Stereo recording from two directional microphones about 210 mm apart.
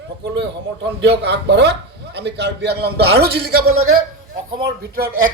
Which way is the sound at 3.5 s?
85° right.